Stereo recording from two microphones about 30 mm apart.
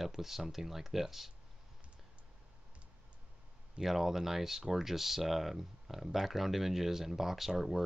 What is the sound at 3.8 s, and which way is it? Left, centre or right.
Speech, centre.